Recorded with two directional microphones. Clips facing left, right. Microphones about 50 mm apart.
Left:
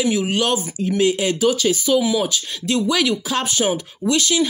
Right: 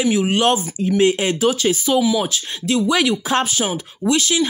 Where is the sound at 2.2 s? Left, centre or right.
Right.